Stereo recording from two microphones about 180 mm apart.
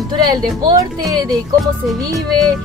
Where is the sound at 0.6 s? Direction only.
20° right (ahead or behind).